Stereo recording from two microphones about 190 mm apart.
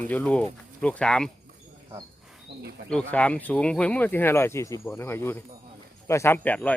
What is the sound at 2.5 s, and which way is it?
Speech, 60° right (ahead or behind).